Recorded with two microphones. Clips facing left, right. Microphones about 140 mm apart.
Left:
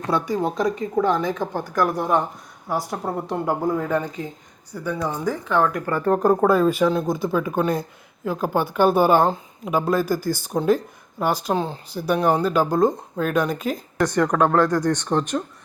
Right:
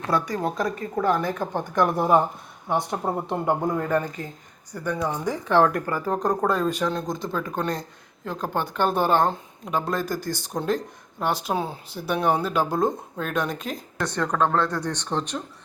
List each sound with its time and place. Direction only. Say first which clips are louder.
0.1 s speech: left 2 dB; centre (ahead or behind)
1.2 s speech: left 2 dB; 10° left (ahead or behind)
5.5 s speech: right 2 dB; 30° right (ahead or behind)
5.9 s speech: left 6 dB; 5° right (ahead or behind)
6.1 s speech: left 6 dB; 5° left (ahead or behind)